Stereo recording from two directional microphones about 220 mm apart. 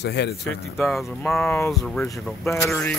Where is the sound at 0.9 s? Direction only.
Centre (ahead or behind).